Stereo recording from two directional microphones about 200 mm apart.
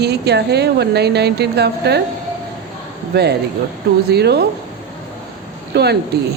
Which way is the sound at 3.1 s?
55° right (ahead or behind).